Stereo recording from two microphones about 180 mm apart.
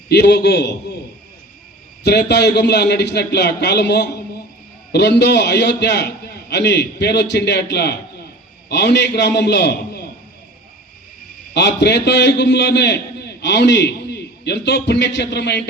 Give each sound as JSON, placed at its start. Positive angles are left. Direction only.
{"t": 0.1, "sound": "a man's voice", "side_deg": 65}
{"t": 2.0, "sound": "a man's voice", "side_deg": 65}
{"t": 11.5, "sound": "a man's voice", "side_deg": 70}